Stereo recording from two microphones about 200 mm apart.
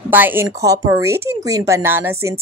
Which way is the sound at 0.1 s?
10° right (ahead or behind).